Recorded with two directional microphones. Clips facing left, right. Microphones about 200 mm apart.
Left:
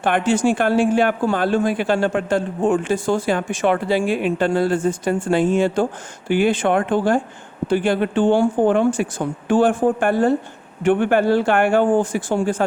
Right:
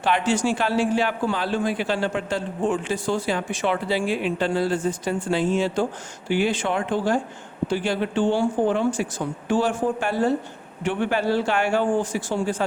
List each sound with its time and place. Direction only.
0.0 s speech: 50° left (ahead or behind)